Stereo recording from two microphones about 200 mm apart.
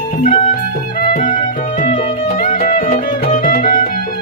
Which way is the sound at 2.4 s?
45° left (ahead or behind).